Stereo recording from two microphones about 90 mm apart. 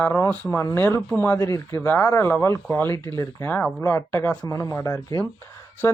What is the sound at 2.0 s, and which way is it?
Speech, 30° left (ahead or behind).